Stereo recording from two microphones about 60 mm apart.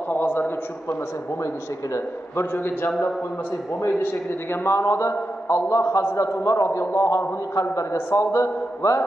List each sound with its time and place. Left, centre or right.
0.1 s a sound: left
2.3 s a man's voice: left
4.7 s a man's voice: left